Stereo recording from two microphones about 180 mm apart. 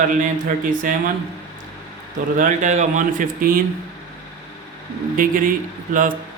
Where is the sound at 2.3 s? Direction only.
45° right (ahead or behind).